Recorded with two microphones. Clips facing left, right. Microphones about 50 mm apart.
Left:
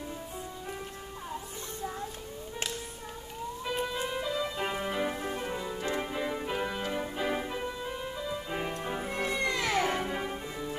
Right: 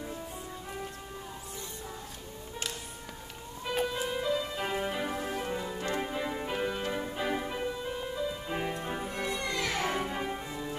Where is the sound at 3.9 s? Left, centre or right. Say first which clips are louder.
Right 1 dB; centre.